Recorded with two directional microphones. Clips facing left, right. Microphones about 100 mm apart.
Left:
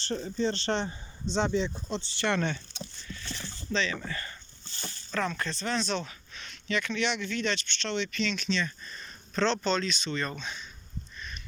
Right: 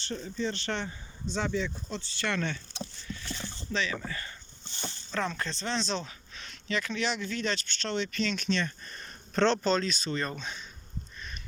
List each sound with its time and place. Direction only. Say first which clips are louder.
0.1 s speech: left 4 dB; 35° left (ahead or behind)
3.2 s speech: left 2 dB; 20° right (ahead or behind)
4.6 s a sound: right 3 dB; 20° right (ahead or behind)
5.3 s speech: left 1 dB; 30° right (ahead or behind); by 9.6 s 50° right (ahead or behind)
9.6 s speech: right 1 dB; 40° right (ahead or behind)